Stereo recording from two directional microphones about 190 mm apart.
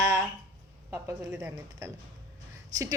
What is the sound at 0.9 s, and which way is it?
Speech, 15° right (ahead or behind).